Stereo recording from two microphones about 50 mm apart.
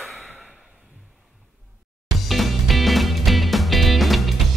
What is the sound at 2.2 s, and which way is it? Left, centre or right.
Music, centre.